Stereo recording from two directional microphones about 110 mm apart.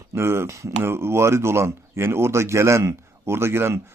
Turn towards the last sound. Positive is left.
turn(degrees=-25)  # may be behind; listen again after turning